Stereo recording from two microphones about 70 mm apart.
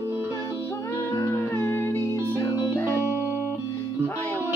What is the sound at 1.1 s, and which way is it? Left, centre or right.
Music, left.